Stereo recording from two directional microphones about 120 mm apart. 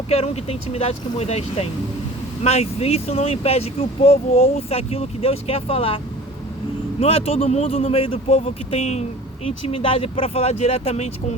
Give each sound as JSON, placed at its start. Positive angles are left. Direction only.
{"t": 0.1, "sound": "speech", "side_deg": 60}
{"t": 7.0, "sound": "speech", "side_deg": 55}